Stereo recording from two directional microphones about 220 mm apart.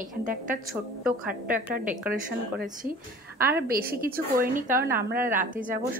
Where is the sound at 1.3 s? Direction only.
40° right (ahead or behind).